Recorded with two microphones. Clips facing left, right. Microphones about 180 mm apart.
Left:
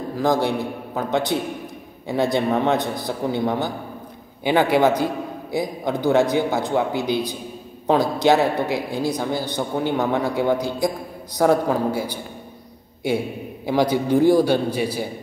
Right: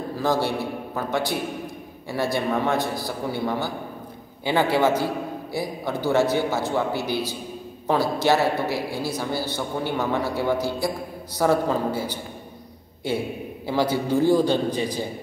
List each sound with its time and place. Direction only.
0.1 s a woman's voice: 15° left (ahead or behind)
13.7 s a woman's voice: 15° left (ahead or behind)